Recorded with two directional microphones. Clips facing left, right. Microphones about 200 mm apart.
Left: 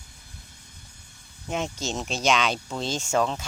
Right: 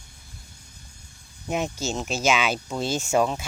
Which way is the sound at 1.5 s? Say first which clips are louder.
Right 2 dB; 10° right (ahead or behind).